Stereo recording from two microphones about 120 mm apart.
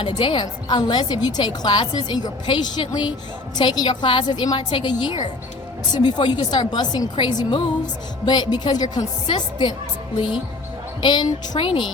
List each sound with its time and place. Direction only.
0.0 s a woman's voice: 40° left (ahead or behind)
11.0 s a woman's voice: 35° left (ahead or behind)